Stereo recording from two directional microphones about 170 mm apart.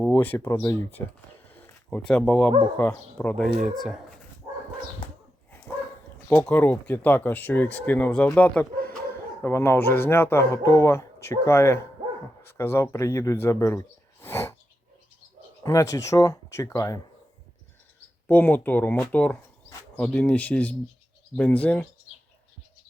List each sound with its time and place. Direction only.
0.0 s speech: 10° left (ahead or behind)
1.5 s a sound: 10° left (ahead or behind)
2.7 s speech: 10° left (ahead or behind)
6.2 s speech: 10° left (ahead or behind)
15.6 s speech: 20° left (ahead or behind)
18.3 s speech: 10° left (ahead or behind)